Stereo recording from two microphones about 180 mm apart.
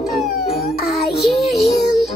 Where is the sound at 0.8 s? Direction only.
Centre (ahead or behind).